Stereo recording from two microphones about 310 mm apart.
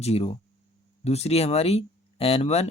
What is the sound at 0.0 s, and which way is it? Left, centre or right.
Speech, centre.